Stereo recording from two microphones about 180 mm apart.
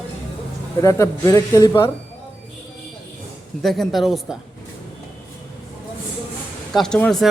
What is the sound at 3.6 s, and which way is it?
Speech, centre (ahead or behind).